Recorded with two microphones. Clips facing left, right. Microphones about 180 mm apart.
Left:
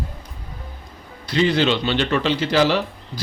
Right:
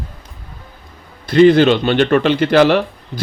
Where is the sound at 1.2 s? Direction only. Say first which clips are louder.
Right 10 dB; 55° right (ahead or behind).